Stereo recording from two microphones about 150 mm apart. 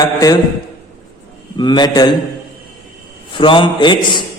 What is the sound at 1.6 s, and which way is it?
Speech, 30° left (ahead or behind).